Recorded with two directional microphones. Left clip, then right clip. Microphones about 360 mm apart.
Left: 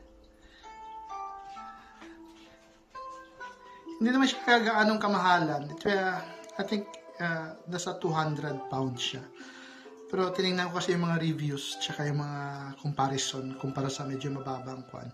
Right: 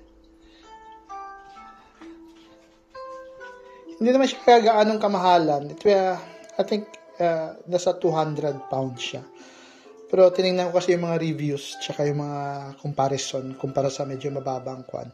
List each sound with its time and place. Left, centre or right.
4.0 s speech: centre
14.4 s speech: centre